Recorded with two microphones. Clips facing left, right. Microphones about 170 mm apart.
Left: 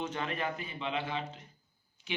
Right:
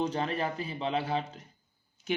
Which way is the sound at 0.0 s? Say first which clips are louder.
Right 5 dB; 35° right (ahead or behind).